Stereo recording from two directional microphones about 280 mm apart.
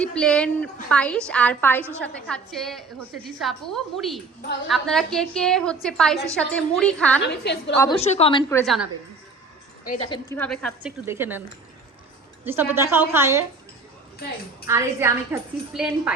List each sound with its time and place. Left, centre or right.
0.0 s a woman's voice: centre
7.2 s a woman's voice: left
7.8 s a woman's voice: centre
9.8 s a woman's voice: left
10.1 s a woman's voice: centre
11.0 s a woman's voice: centre
12.5 s a woman's voice: centre
14.7 s a woman's voice: centre